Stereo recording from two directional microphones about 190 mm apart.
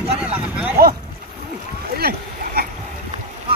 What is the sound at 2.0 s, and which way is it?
Speech, 55° right (ahead or behind).